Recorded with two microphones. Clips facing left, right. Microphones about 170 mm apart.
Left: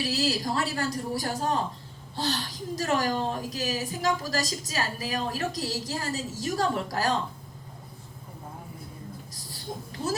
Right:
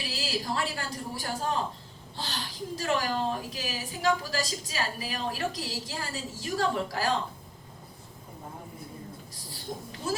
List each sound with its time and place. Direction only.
0.0 s a woman's voice: 40° left (ahead or behind)
10.0 s speech: 40° left (ahead or behind)